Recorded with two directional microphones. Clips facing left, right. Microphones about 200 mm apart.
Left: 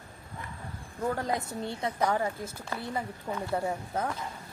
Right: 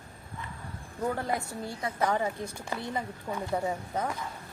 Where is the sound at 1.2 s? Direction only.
20° left (ahead or behind).